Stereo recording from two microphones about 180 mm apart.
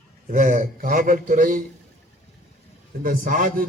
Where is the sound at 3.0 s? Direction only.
50° right (ahead or behind).